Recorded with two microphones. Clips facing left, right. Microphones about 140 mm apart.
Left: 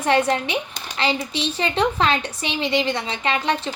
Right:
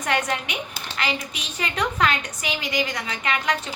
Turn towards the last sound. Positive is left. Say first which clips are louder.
# left 3 dB
turn(degrees=30)  # may be behind; listen again after turning